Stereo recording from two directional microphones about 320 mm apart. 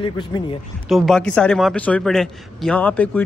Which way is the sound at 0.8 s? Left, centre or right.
Centre.